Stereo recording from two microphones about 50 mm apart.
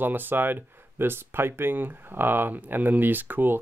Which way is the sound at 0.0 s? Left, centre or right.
Right.